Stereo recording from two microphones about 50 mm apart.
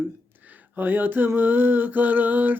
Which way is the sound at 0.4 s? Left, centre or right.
Right.